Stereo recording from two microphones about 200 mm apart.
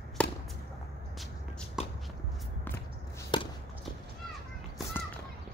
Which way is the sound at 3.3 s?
25° left (ahead or behind).